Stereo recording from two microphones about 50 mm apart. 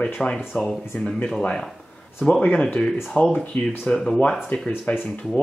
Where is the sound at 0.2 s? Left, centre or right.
Centre.